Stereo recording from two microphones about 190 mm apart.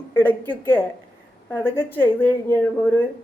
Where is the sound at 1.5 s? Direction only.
10° left (ahead or behind).